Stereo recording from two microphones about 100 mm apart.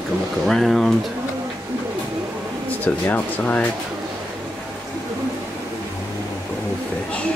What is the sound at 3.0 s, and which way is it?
Speech, 20° left (ahead or behind).